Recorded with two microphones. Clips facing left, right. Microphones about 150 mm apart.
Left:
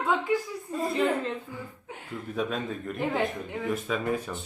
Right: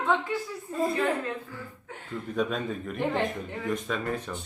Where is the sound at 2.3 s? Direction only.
Centre (ahead or behind).